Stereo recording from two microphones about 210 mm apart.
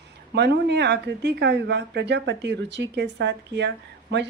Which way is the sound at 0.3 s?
55° right (ahead or behind).